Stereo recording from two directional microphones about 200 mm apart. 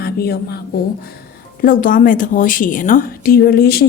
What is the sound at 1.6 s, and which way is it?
A woman's voice, 40° left (ahead or behind).